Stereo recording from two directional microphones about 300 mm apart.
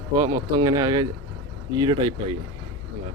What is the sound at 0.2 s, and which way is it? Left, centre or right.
Speech, centre.